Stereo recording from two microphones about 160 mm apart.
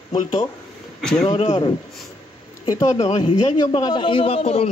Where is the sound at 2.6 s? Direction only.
25° left (ahead or behind).